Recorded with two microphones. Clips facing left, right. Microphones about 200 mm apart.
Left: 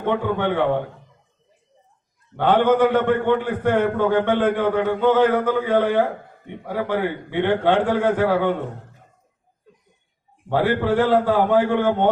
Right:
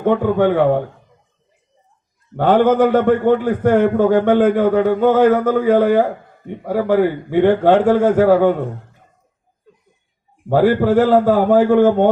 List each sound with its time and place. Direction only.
0.0 s a man's voice: 45° right (ahead or behind)
2.3 s a man's voice: 45° right (ahead or behind)
10.5 s a man's voice: 40° right (ahead or behind)